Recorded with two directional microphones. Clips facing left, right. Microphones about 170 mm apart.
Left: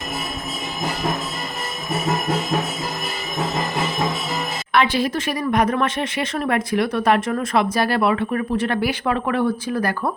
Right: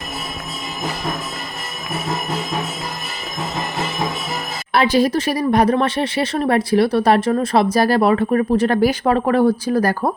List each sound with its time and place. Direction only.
4.7 s speech: 35° right (ahead or behind)